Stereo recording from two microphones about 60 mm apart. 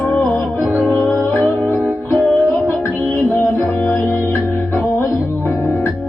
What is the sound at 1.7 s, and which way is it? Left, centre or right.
Music, centre.